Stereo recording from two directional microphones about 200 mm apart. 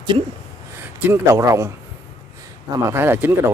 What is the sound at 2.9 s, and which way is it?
Speech, 10° right (ahead or behind).